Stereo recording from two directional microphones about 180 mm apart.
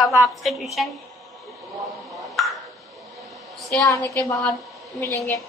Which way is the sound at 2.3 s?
Centre (ahead or behind).